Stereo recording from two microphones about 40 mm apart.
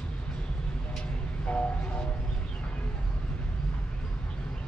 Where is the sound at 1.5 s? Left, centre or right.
Left.